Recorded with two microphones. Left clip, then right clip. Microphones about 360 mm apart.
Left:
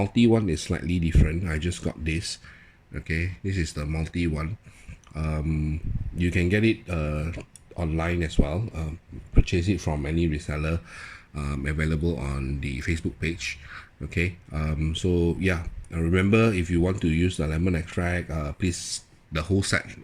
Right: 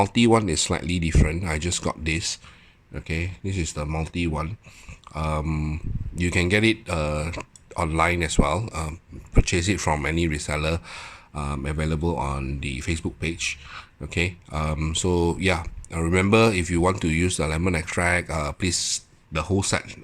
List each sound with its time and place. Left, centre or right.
0.0 s speech: centre
9.4 s speech: centre